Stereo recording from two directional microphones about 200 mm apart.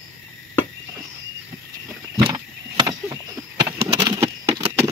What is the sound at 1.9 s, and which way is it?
Vehicle, 15° right (ahead or behind).